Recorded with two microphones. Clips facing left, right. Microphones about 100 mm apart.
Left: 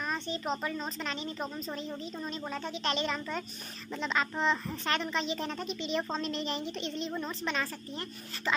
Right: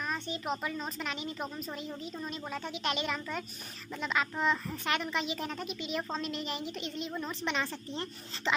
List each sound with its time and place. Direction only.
0.0 s a woman's voice: 5° right (ahead or behind)
2.5 s a woman's voice: 10° right (ahead or behind)
7.4 s a woman's voice: 20° right (ahead or behind)